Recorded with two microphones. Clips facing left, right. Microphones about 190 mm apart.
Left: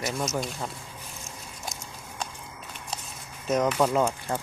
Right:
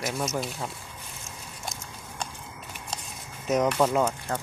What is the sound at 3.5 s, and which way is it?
Speech, centre (ahead or behind).